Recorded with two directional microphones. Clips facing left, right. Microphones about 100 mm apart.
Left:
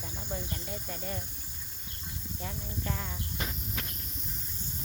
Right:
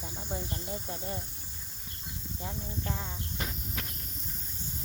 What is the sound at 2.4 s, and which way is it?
Speech, 20° right (ahead or behind).